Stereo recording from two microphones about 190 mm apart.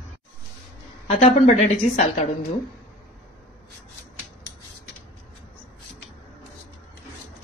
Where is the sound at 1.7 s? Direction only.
40° left (ahead or behind).